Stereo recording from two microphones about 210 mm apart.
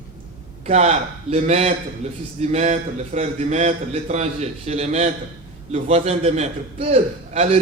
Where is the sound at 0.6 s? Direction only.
30° right (ahead or behind).